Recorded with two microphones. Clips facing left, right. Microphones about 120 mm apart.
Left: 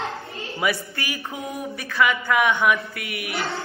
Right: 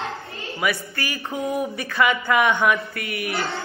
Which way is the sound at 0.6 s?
25° left (ahead or behind).